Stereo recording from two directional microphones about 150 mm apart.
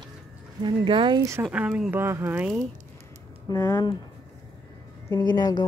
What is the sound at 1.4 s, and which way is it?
Speech, 5° right (ahead or behind).